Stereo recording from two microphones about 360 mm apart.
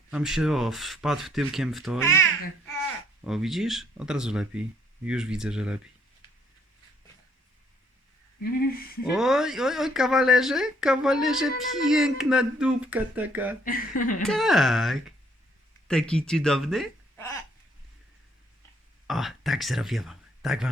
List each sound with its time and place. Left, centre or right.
0.1 s speech: centre
3.2 s speech: centre
8.4 s speech: left
9.0 s speech: centre
13.7 s speech: left
14.3 s speech: centre
19.0 s speech: centre